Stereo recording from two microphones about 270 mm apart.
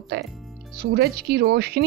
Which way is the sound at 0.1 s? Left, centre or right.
Right.